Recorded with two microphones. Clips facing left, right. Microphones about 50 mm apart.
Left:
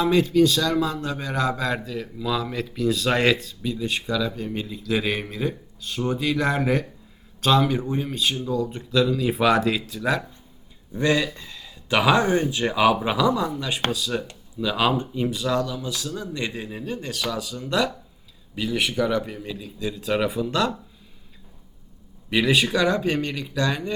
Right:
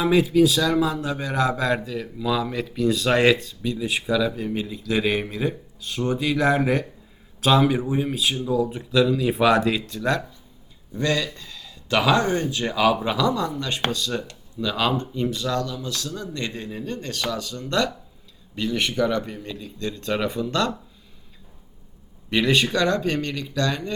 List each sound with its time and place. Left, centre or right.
0.0 s a man's voice: centre
10.9 s speech: centre
22.3 s speech: centre